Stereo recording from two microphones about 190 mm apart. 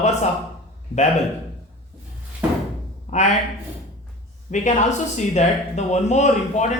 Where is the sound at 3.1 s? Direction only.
35° left (ahead or behind).